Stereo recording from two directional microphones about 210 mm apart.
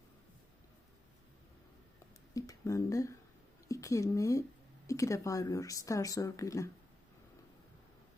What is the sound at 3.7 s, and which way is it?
Speech, 15° left (ahead or behind).